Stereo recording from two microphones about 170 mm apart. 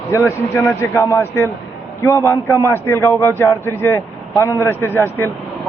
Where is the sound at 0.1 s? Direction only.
15° left (ahead or behind).